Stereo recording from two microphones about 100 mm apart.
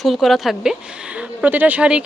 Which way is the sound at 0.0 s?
Centre (ahead or behind).